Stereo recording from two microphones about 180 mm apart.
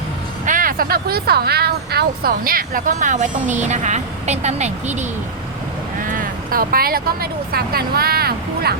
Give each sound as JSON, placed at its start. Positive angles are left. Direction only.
{"t": 0.4, "sound": "speech", "side_deg": -50}
{"t": 6.1, "sound": "speech", "side_deg": -50}